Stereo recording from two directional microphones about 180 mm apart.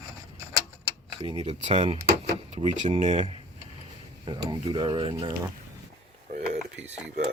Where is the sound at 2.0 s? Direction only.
55° right (ahead or behind).